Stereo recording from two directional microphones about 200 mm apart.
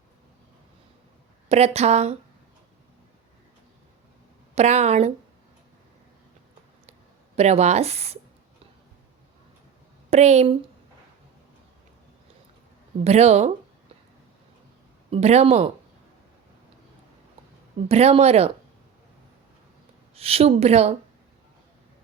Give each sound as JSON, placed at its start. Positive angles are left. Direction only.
{"t": 1.5, "sound": "speech", "side_deg": -30}
{"t": 4.5, "sound": "speech", "side_deg": -35}
{"t": 7.3, "sound": "speech", "side_deg": -35}
{"t": 10.1, "sound": "speech", "side_deg": -35}
{"t": 13.1, "sound": "speech", "side_deg": -35}
{"t": 15.1, "sound": "speech", "side_deg": -30}
{"t": 17.8, "sound": "speech", "side_deg": -30}
{"t": 20.1, "sound": "speech", "side_deg": -30}